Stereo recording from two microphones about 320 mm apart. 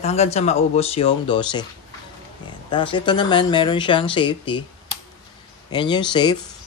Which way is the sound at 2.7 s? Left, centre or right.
Centre.